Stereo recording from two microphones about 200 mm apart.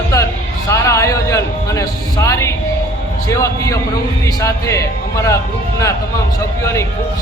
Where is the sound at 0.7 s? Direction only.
15° left (ahead or behind).